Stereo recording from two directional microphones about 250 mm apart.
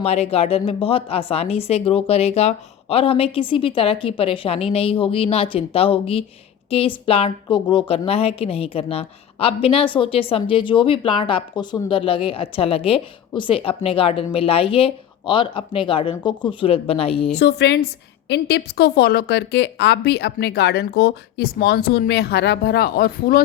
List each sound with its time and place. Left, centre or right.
0.0 s a woman's voice: left
17.3 s a woman's voice: left